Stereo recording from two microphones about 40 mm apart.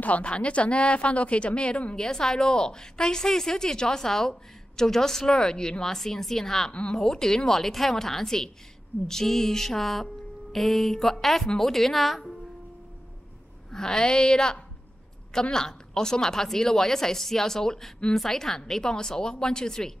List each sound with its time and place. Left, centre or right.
0.0 s a woman's voice: left
2.0 s a woman's voice: centre
6.7 s a woman's voice: left
7.0 s a woman's voice: centre
13.7 s a woman's voice: centre